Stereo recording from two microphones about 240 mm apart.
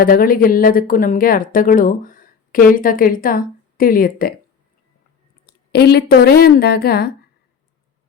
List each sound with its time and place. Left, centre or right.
0.0 s a woman's voice: left
5.7 s a woman's voice: left